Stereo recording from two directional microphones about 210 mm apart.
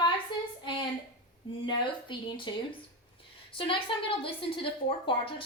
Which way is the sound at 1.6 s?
20° left (ahead or behind).